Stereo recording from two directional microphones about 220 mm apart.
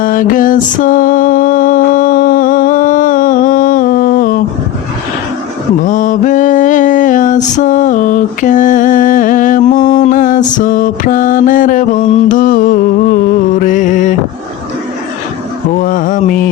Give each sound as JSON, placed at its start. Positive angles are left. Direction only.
{"t": 0.0, "sound": "music", "side_deg": 40}
{"t": 5.8, "sound": "mantra", "side_deg": 35}
{"t": 13.6, "sound": "music", "side_deg": 35}
{"t": 15.8, "sound": "music", "side_deg": 40}